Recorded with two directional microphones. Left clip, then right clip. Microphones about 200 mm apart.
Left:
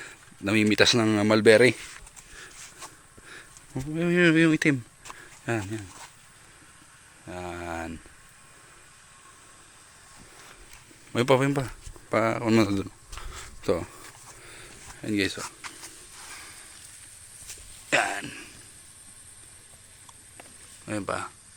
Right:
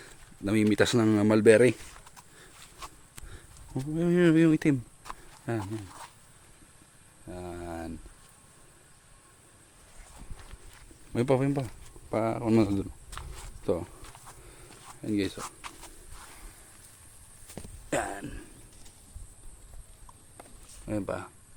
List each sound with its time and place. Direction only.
0.0 s speech: centre (ahead or behind)
2.8 s a sound: 5° right (ahead or behind)
3.9 s speech: 10° right (ahead or behind)
5.5 s speech: 5° left (ahead or behind)
7.3 s speech: 10° left (ahead or behind)
11.1 s speech: centre (ahead or behind)
14.4 s a sound: 5° right (ahead or behind)
17.8 s a sound: 15° right (ahead or behind)
20.8 s speech: 10° right (ahead or behind)